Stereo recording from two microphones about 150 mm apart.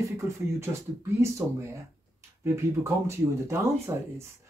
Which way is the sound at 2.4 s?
20° right (ahead or behind).